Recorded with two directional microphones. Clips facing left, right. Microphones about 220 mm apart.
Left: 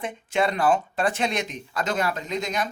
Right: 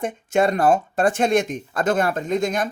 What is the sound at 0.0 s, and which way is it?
Speech, 45° right (ahead or behind).